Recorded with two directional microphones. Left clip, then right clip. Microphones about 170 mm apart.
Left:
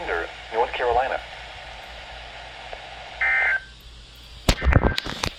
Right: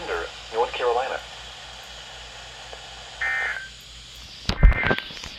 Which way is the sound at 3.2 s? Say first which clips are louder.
Left 5 dB; 25° left (ahead or behind).